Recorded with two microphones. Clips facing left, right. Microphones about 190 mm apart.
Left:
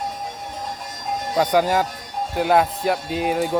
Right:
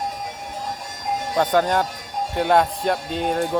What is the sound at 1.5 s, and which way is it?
Speech, 5° left (ahead or behind).